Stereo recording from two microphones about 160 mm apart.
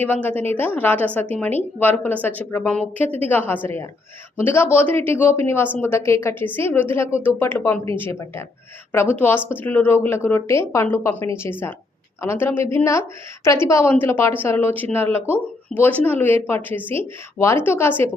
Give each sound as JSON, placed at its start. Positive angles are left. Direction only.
{"t": 0.0, "sound": "speech", "side_deg": 10}
{"t": 12.2, "sound": "speech", "side_deg": 15}